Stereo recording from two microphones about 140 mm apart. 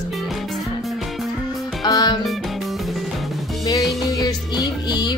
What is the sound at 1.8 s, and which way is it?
Music, 30° left (ahead or behind).